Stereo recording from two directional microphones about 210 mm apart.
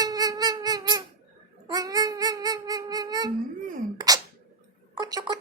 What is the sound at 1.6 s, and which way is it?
Babbling, 20° right (ahead or behind).